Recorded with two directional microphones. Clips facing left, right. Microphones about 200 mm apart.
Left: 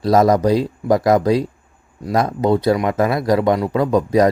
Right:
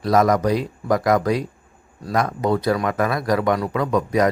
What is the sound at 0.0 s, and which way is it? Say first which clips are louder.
Speech: left 4 dB; 30° left (ahead or behind).